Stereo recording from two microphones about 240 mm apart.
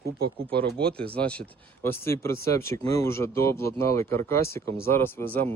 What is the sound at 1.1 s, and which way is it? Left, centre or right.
Speech, centre.